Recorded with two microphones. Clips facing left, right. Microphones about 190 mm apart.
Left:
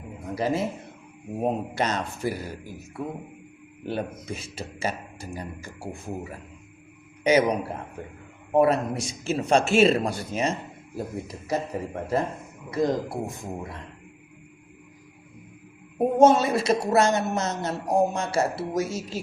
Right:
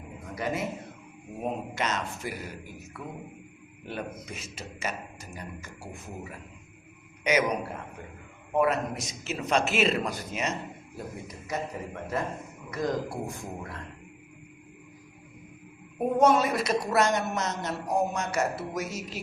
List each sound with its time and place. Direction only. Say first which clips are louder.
0.3 s speech: left 5 dB; 30° left (ahead or behind)
3.8 s speech: left 6 dB; 30° left (ahead or behind)
8.5 s speech: left 5 dB; 30° left (ahead or behind)
12.7 s a woman's voice: left 5 dB; 25° left (ahead or behind)
16.0 s a woman's voice: left 4 dB; 25° left (ahead or behind)